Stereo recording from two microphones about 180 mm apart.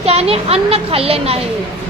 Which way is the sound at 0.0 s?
35° right (ahead or behind).